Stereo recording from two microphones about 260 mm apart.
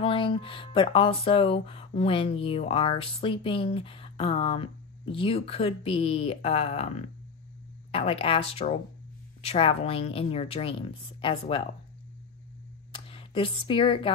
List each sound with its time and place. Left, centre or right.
0.0 s speech: centre
12.9 s speech: centre